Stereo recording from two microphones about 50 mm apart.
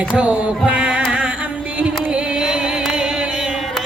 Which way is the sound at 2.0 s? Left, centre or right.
Right.